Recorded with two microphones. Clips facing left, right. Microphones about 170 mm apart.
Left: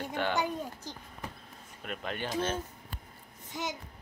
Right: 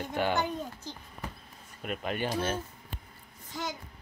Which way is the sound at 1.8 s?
10° right (ahead or behind).